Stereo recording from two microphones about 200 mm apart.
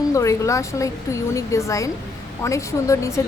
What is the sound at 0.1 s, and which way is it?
A woman's voice, 15° left (ahead or behind).